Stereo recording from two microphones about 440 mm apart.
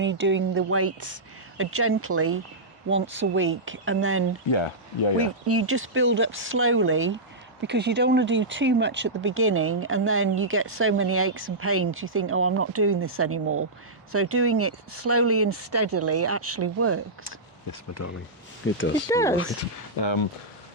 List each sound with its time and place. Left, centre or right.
0.0 s speech: right
4.5 s speech: left
5.1 s speech: right
17.7 s speech: left
19.0 s speech: centre
20.0 s speech: left